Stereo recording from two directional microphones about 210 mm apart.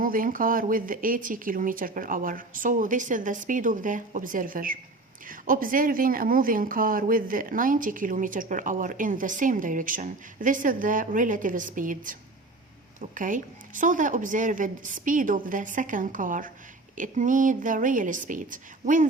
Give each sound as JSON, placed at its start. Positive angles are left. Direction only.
{"t": 0.0, "sound": "speech", "side_deg": -40}